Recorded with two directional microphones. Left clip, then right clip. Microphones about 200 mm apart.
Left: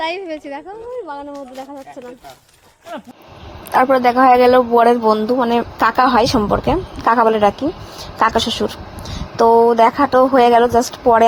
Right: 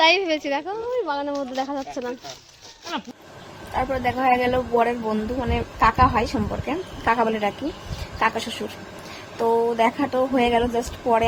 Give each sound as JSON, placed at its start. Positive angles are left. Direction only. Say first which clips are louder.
{"t": 0.0, "sound": "a woman's voice", "louder": "right 5 dB", "side_deg": -25}
{"t": 3.8, "sound": "speech", "louder": "left 12 dB", "side_deg": 35}